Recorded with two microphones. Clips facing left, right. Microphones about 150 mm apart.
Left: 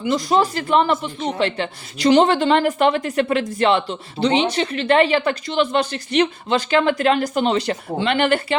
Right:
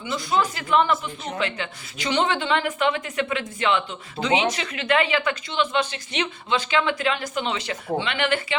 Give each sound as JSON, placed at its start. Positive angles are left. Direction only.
{"t": 0.0, "sound": "speech", "side_deg": 40}